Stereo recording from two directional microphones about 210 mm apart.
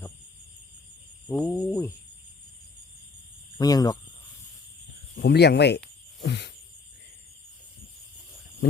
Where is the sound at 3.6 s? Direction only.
15° left (ahead or behind).